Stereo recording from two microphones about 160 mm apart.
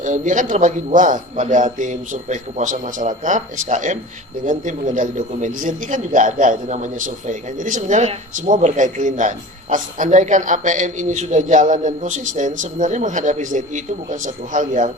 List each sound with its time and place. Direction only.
0.0 s a man's voice: 50° right (ahead or behind)